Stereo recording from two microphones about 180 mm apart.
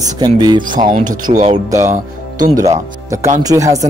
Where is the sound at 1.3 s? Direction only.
40° right (ahead or behind).